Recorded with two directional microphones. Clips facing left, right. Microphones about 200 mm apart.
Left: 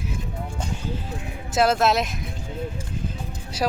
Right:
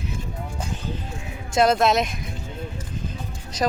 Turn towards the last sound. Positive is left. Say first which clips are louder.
# right 1 dB
turn(degrees=10)  # may be behind; listen again after turning